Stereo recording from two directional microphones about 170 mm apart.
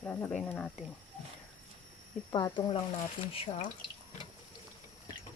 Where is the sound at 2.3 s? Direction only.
20° left (ahead or behind).